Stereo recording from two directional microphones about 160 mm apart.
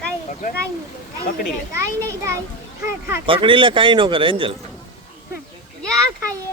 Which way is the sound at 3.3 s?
35° right (ahead or behind).